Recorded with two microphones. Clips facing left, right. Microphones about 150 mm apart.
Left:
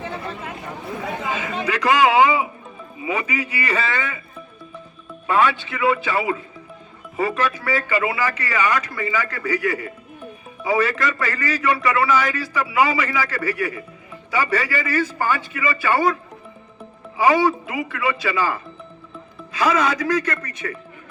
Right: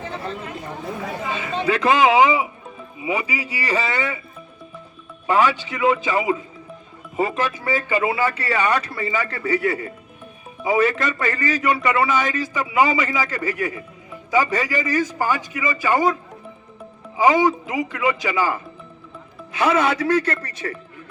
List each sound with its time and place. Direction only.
1.4 s a man's voice: 30° right (ahead or behind); by 4.1 s 10° right (ahead or behind)
5.2 s a man's voice: 15° right (ahead or behind)
17.2 s a man's voice: 20° right (ahead or behind)